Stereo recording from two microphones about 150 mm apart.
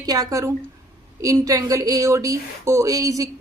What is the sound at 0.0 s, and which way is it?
Speech, 25° right (ahead or behind).